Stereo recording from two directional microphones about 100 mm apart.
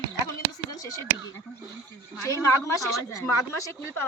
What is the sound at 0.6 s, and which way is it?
Speech, 35° left (ahead or behind).